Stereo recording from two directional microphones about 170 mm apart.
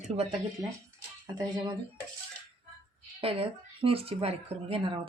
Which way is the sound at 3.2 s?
35° right (ahead or behind).